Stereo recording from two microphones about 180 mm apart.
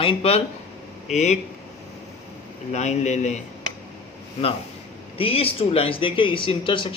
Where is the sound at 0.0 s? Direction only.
30° left (ahead or behind).